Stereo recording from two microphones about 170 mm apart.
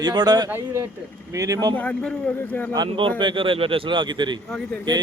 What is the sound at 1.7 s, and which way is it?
Speech, 10° left (ahead or behind).